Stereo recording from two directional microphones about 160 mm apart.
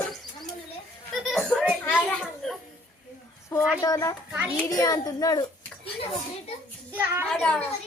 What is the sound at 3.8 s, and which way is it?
A child's voice, 20° left (ahead or behind).